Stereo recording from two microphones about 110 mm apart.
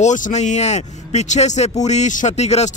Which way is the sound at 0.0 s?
90° left.